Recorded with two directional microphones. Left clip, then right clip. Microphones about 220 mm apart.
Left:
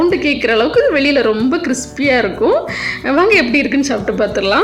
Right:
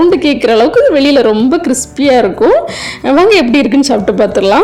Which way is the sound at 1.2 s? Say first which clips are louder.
Right 5 dB; 25° right (ahead or behind).